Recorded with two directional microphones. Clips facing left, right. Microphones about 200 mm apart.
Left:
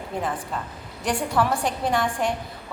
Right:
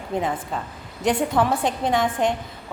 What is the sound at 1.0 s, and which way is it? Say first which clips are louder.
A woman's voice: right 3 dB; 20° right (ahead or behind).